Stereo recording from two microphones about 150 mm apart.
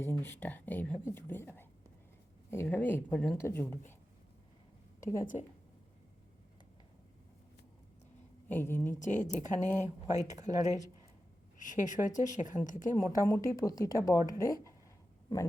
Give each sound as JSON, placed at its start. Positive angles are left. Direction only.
{"t": 0.0, "sound": "speech", "side_deg": 15}
{"t": 4.9, "sound": "speech", "side_deg": 20}
{"t": 5.2, "sound": "speech", "side_deg": 60}
{"t": 8.4, "sound": "speech", "side_deg": 15}
{"t": 9.0, "sound": "a woman's voice", "side_deg": 55}
{"t": 10.5, "sound": "a woman's voice", "side_deg": -20}
{"t": 11.5, "sound": "a woman's voice", "side_deg": 60}
{"t": 13.2, "sound": "a woman's voice", "side_deg": 20}